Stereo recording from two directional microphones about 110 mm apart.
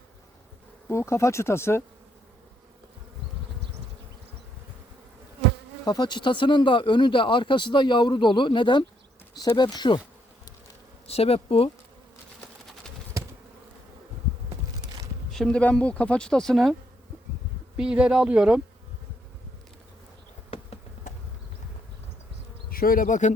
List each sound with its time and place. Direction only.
0.9 s speech: 25° left (ahead or behind)
5.8 s speech: 40° left (ahead or behind)
11.0 s speech: 65° left (ahead or behind)
14.8 s a sound: 35° right (ahead or behind)
15.3 s speech: 5° left (ahead or behind)
17.7 s speech: 10° right (ahead or behind)
23.2 s speech: 90° left